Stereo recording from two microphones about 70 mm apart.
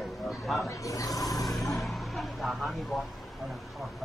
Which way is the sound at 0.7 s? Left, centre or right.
Left.